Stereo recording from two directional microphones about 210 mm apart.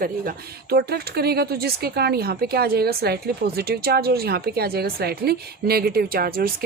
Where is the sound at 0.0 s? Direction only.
45° right (ahead or behind).